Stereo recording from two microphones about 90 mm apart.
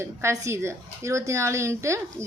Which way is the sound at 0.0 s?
30° right (ahead or behind).